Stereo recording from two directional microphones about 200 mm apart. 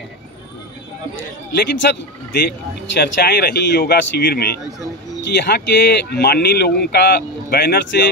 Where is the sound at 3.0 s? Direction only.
50° left (ahead or behind).